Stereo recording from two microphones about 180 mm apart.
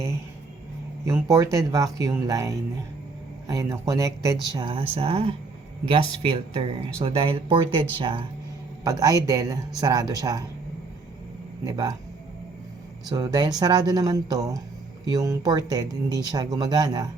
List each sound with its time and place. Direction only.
1.0 s speech: 15° right (ahead or behind)
11.6 s speech: 20° right (ahead or behind)
13.1 s speech: 20° right (ahead or behind)